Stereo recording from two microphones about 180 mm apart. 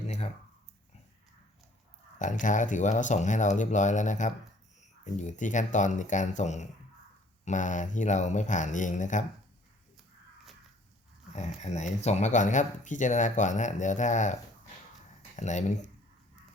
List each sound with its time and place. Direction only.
2.1 s speech: 45° left (ahead or behind)
11.3 s speech: 40° left (ahead or behind)
15.4 s speech: 40° left (ahead or behind)